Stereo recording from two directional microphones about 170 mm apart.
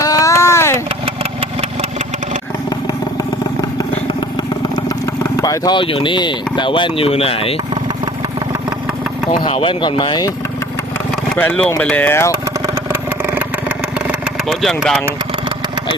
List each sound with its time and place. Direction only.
0.0 s a sound: 20° left (ahead or behind)
2.6 s vehicle: 25° left (ahead or behind)
5.2 s speech: 20° left (ahead or behind)
9.4 s speech: 35° left (ahead or behind)
11.1 s vehicle: 10° left (ahead or behind)
11.8 s speech: 10° left (ahead or behind)
12.6 s vehicle: 10° right (ahead or behind)
14.4 s speech: centre (ahead or behind)